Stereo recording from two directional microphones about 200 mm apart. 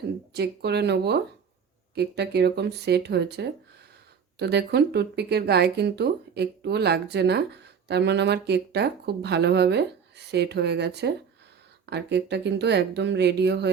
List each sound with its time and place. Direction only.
0.3 s speech: 55° right (ahead or behind)